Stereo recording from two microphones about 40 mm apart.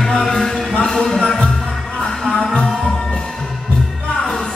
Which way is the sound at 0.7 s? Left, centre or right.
Centre.